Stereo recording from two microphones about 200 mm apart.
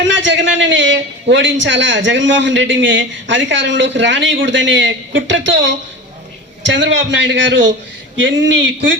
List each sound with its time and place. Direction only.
0.0 s a man's voice: 65° right (ahead or behind)